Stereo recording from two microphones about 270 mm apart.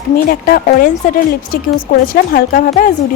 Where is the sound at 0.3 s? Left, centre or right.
Left.